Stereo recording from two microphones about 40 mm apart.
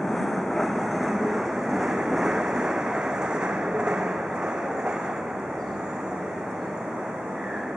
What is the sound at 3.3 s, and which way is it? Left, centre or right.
Train, centre.